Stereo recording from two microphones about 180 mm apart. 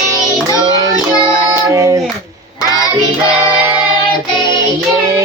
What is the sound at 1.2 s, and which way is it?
Child singing, 20° right (ahead or behind).